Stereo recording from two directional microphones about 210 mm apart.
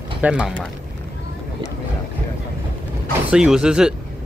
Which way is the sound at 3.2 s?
5° right (ahead or behind).